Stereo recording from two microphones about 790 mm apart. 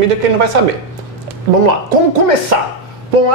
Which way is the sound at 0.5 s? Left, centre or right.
Right.